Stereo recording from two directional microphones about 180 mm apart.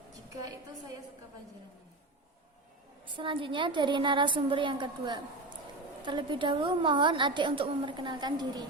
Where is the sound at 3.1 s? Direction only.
25° right (ahead or behind).